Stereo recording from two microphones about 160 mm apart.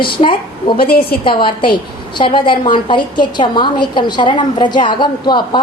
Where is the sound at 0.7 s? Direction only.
70° left (ahead or behind).